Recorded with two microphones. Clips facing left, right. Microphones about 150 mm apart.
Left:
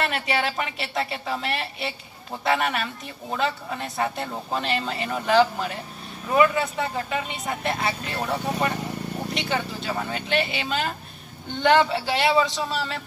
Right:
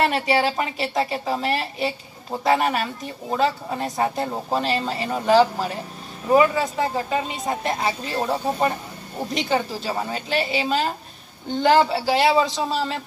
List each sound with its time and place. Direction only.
0.0 s speech: 35° right (ahead or behind)
9.3 s speech: 35° right (ahead or behind)